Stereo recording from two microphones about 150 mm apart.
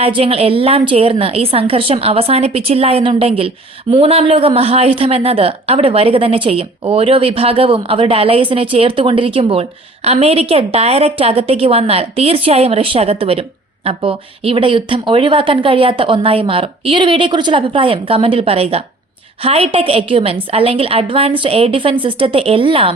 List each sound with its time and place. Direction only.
0.0 s a woman's voice: 35° right (ahead or behind)